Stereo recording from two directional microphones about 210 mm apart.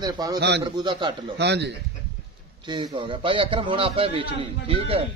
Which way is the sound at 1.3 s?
55° right (ahead or behind).